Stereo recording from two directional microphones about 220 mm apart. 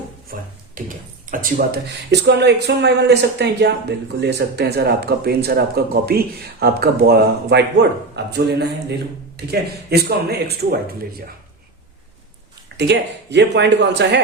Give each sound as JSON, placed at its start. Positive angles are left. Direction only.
{"t": 0.3, "sound": "a sound", "side_deg": -40}
{"t": 0.9, "sound": "speech", "side_deg": -40}
{"t": 12.6, "sound": "speech", "side_deg": -50}